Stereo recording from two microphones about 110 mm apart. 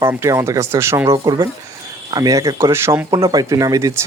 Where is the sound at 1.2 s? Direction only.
35° right (ahead or behind).